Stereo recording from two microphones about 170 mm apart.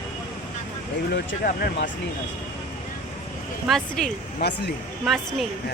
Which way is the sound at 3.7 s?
5° left (ahead or behind).